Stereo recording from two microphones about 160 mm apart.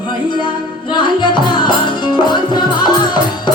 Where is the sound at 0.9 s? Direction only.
30° left (ahead or behind).